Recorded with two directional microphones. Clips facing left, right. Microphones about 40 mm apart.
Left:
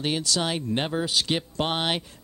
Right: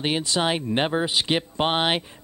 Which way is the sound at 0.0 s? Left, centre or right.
Right.